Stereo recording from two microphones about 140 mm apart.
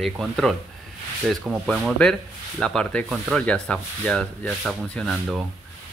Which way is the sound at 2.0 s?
5° left (ahead or behind).